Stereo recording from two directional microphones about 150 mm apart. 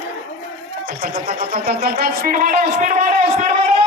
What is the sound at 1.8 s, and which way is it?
A man's voice, 90° right.